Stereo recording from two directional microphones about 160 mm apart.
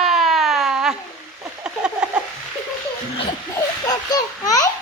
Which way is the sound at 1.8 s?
5° right (ahead or behind).